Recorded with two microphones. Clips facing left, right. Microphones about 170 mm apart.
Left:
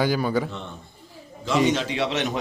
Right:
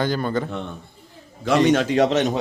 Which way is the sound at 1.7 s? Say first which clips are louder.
Right 6 dB; 50° right (ahead or behind).